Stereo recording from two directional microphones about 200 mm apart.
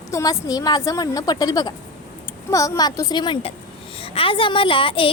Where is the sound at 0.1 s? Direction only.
15° left (ahead or behind).